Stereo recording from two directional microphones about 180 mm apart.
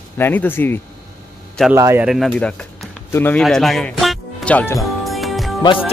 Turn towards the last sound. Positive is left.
turn(degrees=0)  # may be behind; listen again after turning